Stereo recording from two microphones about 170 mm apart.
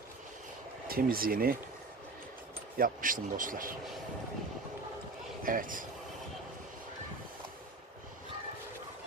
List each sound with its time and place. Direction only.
0.9 s speech: 60° right (ahead or behind)
2.7 s speech: 55° right (ahead or behind)
5.4 s a man's voice: 55° right (ahead or behind)